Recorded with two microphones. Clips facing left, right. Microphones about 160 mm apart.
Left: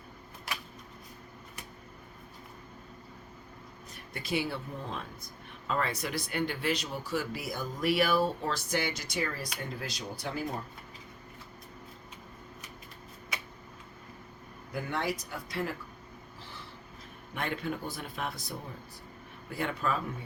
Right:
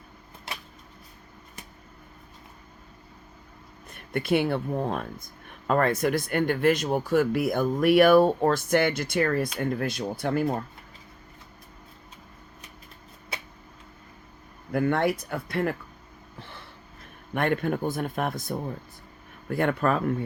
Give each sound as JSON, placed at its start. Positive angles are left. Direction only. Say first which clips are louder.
{"t": 0.5, "sound": "a sound", "louder": "even", "side_deg": -25}
{"t": 3.9, "sound": "speech", "louder": "right 9 dB", "side_deg": -55}
{"t": 14.7, "sound": "speech", "louder": "right 10 dB", "side_deg": -60}
{"t": 17.3, "sound": "speech", "louder": "right 9 dB", "side_deg": -55}